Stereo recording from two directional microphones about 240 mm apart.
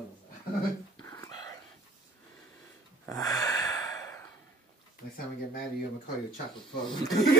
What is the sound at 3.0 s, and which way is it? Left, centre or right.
Breathing, centre.